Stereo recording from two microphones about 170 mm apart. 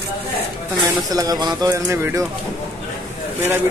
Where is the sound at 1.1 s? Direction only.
20° right (ahead or behind).